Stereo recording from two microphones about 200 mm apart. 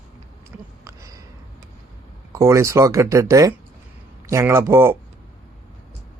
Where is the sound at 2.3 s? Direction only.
15° right (ahead or behind).